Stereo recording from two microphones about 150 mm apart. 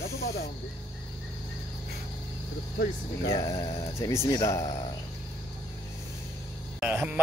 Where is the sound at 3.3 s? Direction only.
25° left (ahead or behind).